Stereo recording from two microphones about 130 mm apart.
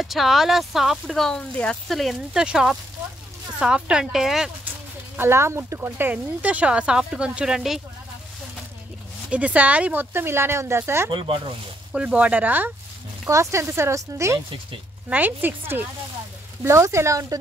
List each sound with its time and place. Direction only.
0.0 s speech: centre (ahead or behind)
5.1 s speech: 20° right (ahead or behind); by 7.8 s 5° right (ahead or behind)
9.3 s speech: 10° right (ahead or behind)
11.1 s speech: 40° right (ahead or behind)
11.9 s speech: 10° right (ahead or behind)
15.0 s speech: 15° right (ahead or behind)